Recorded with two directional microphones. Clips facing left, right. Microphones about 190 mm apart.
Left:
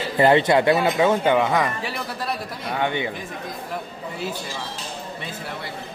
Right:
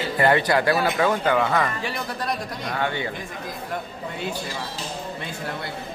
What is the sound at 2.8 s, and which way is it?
Speech, 20° left (ahead or behind).